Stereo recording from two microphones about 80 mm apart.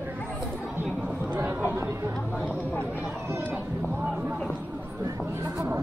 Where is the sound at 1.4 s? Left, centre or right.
Right.